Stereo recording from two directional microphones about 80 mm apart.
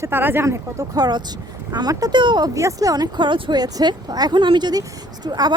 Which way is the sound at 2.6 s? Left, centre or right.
Right.